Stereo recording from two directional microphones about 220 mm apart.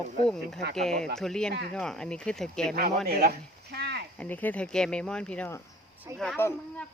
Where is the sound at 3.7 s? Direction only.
50° right (ahead or behind).